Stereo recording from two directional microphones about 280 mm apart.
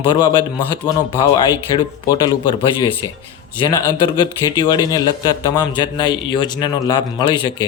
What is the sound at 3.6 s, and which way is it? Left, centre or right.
Speech, centre.